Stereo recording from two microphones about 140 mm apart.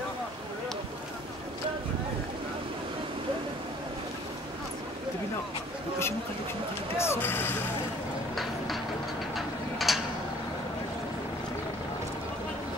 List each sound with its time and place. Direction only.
7.0 s speech: 15° left (ahead or behind)
8.4 s a sound: centre (ahead or behind)
9.3 s ratchet: centre (ahead or behind)